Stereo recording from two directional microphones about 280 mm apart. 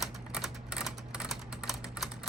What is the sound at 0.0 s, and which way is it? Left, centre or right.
Typing, centre.